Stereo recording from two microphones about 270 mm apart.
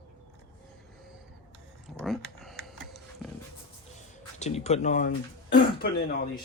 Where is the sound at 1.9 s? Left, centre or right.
Centre.